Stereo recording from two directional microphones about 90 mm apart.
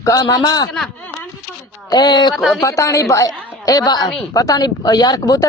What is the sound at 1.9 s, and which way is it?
Speech, 50° left (ahead or behind).